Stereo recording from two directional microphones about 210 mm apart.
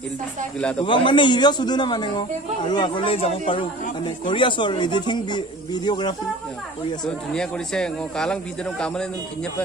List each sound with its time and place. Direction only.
0.6 s a man's voice: 5° left (ahead or behind)
0.8 s speech: 25° left (ahead or behind)
7.1 s a man's voice: 5° left (ahead or behind)